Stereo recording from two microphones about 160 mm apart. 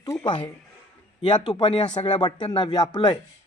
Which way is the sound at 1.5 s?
30° left (ahead or behind).